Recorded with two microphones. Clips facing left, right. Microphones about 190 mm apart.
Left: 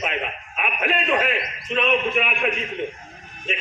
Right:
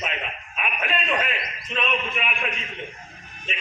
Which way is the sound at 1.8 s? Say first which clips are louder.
Left 6 dB; 50° left (ahead or behind).